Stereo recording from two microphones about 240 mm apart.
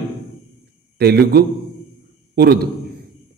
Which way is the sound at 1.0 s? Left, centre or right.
Right.